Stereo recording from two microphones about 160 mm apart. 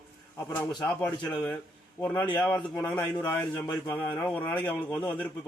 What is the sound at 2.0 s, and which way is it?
A man's voice, 10° left (ahead or behind).